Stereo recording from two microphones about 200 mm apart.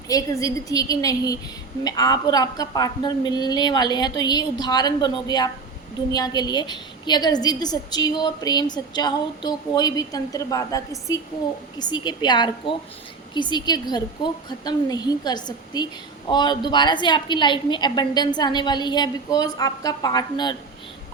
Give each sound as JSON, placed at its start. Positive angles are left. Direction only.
{"t": 0.1, "sound": "a woman's voice", "side_deg": 15}